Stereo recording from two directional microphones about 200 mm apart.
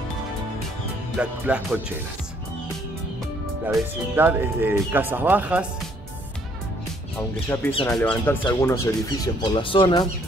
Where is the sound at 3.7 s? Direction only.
10° right (ahead or behind).